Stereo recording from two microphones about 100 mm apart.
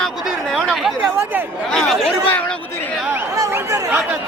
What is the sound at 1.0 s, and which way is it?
Speech, 20° right (ahead or behind).